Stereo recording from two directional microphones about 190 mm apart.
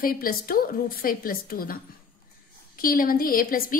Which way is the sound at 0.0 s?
50° left (ahead or behind).